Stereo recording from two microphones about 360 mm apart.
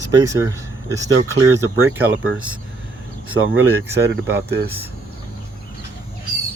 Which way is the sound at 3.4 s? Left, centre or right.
Right.